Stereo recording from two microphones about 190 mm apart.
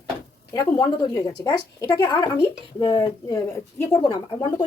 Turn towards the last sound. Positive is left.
turn(degrees=25)  # may be behind; listen again after turning